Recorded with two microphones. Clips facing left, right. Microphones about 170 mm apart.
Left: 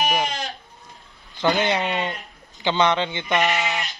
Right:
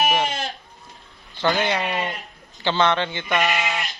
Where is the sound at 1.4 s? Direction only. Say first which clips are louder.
Left 1 dB; 20° left (ahead or behind).